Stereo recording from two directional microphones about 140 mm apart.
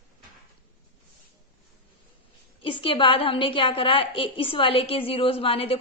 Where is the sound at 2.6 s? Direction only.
40° left (ahead or behind).